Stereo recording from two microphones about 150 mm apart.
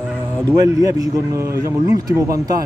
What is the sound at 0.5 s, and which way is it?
Speech, 25° right (ahead or behind).